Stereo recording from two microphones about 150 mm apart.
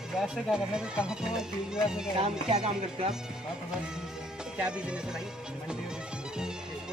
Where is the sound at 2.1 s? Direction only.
40° right (ahead or behind).